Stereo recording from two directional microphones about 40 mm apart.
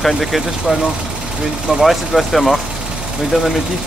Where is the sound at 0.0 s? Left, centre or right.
Centre.